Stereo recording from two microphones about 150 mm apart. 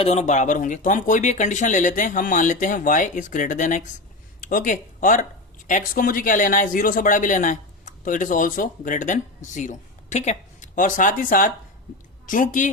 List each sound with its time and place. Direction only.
0.0 s speech: 45° left (ahead or behind)